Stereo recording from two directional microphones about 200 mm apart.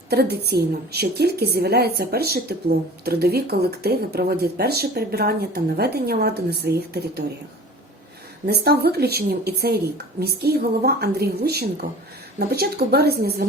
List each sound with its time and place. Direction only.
0.1 s a woman's voice: 50° right (ahead or behind)
8.4 s a woman's voice: 50° right (ahead or behind)